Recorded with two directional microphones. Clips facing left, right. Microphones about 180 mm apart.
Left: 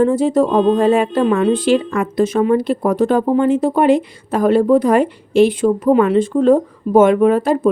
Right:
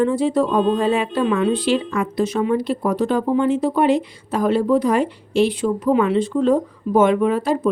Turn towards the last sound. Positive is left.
turn(degrees=50)  # may be behind; listen again after turning